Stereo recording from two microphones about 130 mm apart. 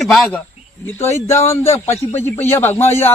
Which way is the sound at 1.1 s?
20° left (ahead or behind).